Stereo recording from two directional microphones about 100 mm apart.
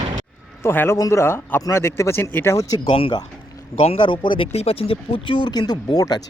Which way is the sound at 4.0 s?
50° left (ahead or behind).